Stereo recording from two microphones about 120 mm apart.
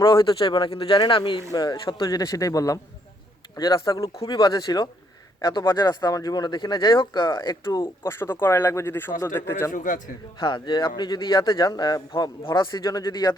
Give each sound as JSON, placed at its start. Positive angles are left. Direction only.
{"t": 0.0, "sound": "a man's voice", "side_deg": 45}
{"t": 2.0, "sound": "speech", "side_deg": 30}
{"t": 3.8, "sound": "a man's voice", "side_deg": 30}
{"t": 9.7, "sound": "a man's voice", "side_deg": 90}
{"t": 10.4, "sound": "a man's voice", "side_deg": 40}